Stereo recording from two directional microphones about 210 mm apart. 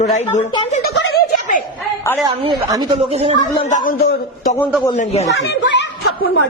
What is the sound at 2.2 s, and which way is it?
Speech, 20° right (ahead or behind).